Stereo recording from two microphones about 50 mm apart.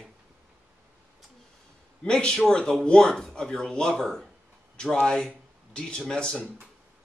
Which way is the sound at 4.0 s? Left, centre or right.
Centre.